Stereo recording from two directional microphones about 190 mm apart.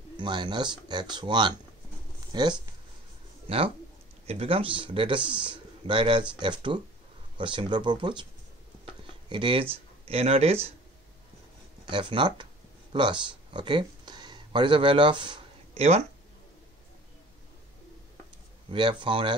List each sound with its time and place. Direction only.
0.2 s a man's voice: 25° right (ahead or behind)
11.8 s a man's voice: 25° right (ahead or behind)
18.7 s a man's voice: 25° right (ahead or behind)